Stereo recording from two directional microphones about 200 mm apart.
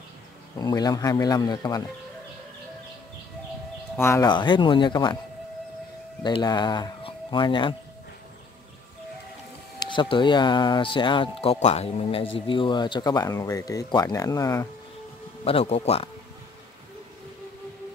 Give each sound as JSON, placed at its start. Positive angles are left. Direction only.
{"t": 0.6, "sound": "speech", "side_deg": 20}
{"t": 3.9, "sound": "speech", "side_deg": 10}
{"t": 6.2, "sound": "speech", "side_deg": 20}
{"t": 9.8, "sound": "speech", "side_deg": 25}
{"t": 15.4, "sound": "speech", "side_deg": 30}